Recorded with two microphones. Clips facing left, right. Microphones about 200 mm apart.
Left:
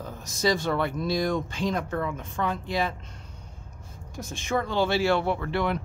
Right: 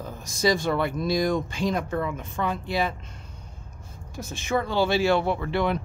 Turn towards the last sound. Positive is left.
turn(degrees=-20)  # may be behind; listen again after turning